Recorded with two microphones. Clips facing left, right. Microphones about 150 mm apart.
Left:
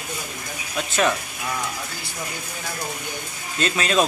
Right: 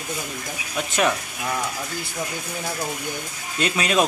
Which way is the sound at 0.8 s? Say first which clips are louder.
Even; 10° right (ahead or behind).